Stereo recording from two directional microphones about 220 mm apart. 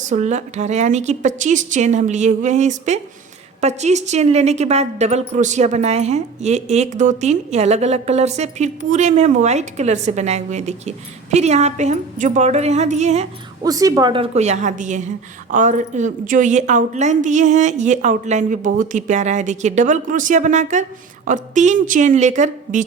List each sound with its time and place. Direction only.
0.1 s a woman's voice: 30° right (ahead or behind)
13.6 s a woman's voice: 15° right (ahead or behind); by 22.8 s 35° right (ahead or behind)